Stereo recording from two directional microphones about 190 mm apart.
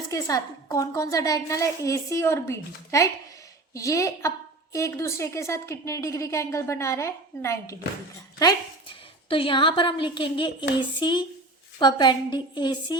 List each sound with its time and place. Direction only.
0.1 s a woman's voice: 15° left (ahead or behind)